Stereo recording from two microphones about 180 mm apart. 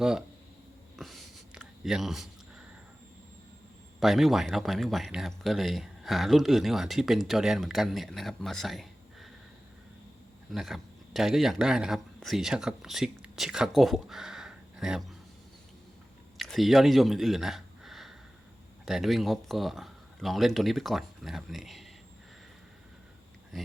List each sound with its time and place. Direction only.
0.9 s a sound: centre (ahead or behind)
4.0 s speech: centre (ahead or behind)
10.5 s a man's voice: centre (ahead or behind)
16.4 s speech: centre (ahead or behind)